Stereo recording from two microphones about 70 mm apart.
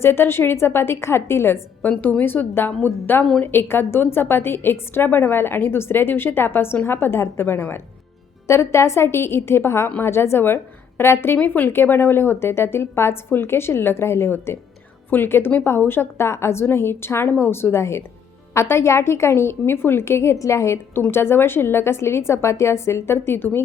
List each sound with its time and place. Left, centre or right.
0.0 s a woman's voice: left
1.8 s a woman's voice: left
11.3 s a woman's voice: left